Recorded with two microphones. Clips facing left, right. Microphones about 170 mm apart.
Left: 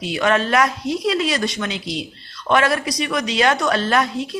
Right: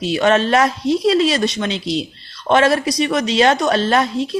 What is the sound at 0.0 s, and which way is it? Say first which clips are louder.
A woman's voice: right 4 dB; 25° right (ahead or behind).